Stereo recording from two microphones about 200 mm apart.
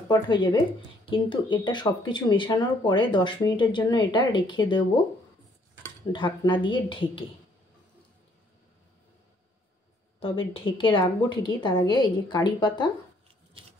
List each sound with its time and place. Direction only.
0.1 s speech: 20° left (ahead or behind)
6.1 s speech: 25° left (ahead or behind)
10.5 s speech: 25° left (ahead or behind)